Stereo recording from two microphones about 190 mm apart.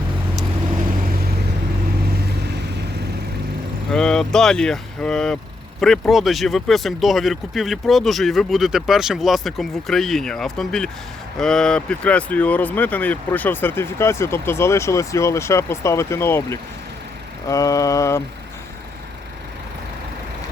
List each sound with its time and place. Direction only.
3.9 s speech: 5° left (ahead or behind)